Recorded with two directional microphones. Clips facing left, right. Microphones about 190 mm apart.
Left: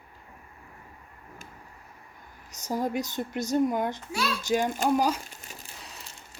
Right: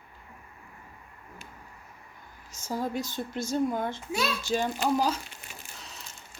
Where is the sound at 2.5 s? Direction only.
20° left (ahead or behind).